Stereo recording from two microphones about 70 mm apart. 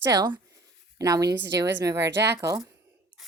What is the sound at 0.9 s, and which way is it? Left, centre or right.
A woman's voice, right.